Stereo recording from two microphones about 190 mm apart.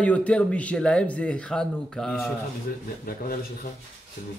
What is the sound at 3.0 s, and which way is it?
Speech, 50° left (ahead or behind).